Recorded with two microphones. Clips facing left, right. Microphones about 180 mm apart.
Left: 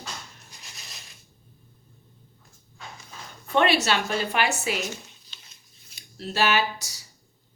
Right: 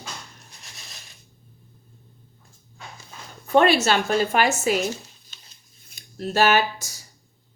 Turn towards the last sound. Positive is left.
turn(degrees=-50)  # may be behind; listen again after turning